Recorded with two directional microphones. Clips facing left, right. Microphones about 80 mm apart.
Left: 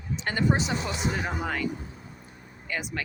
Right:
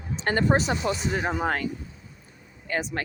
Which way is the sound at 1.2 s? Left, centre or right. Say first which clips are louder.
Right 4 dB; right.